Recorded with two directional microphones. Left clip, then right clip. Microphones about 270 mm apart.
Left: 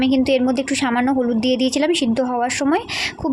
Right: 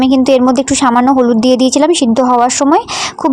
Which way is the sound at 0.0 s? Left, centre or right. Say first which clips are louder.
Right 8 dB; right.